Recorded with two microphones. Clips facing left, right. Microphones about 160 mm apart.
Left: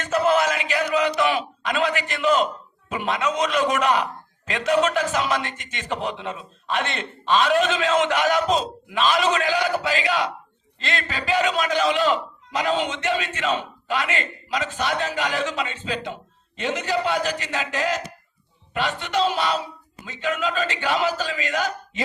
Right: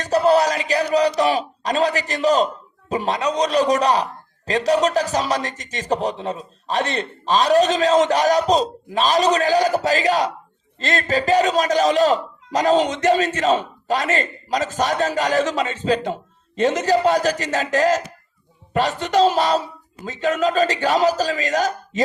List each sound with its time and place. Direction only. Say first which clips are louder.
0.0 s a man's voice: right 4 dB; 35° right (ahead or behind)